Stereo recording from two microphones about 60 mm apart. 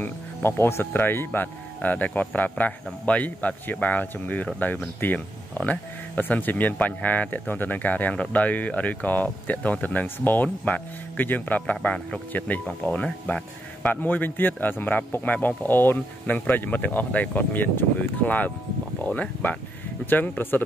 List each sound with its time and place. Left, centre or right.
0.0 s speech: left
11.7 s speech: centre
12.3 s a man's voice: left